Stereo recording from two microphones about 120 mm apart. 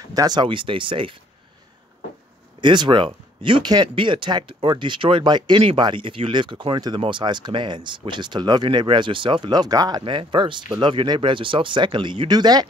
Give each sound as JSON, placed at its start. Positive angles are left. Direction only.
{"t": 0.0, "sound": "speech", "side_deg": -30}
{"t": 2.6, "sound": "speech", "side_deg": -40}